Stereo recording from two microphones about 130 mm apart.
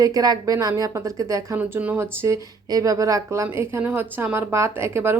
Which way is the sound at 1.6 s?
10° right (ahead or behind).